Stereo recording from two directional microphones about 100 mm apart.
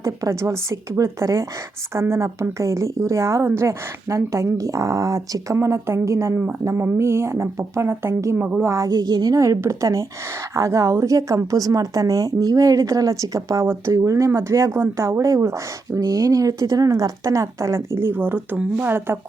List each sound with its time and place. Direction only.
0.0 s a woman's voice: 30° right (ahead or behind)
8.4 s speech: 10° right (ahead or behind)
8.6 s a woman's voice: 30° right (ahead or behind)
8.9 s a woman's voice: 45° right (ahead or behind); by 19.2 s 25° right (ahead or behind)